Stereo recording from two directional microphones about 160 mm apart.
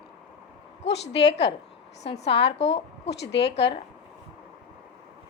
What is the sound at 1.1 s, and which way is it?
Speech, 90° left.